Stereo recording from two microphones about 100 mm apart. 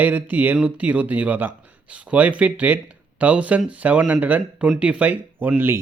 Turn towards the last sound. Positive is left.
turn(degrees=-20)  # may be behind; listen again after turning